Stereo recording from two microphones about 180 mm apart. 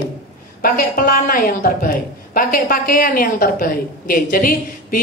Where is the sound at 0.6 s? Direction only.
55° left (ahead or behind).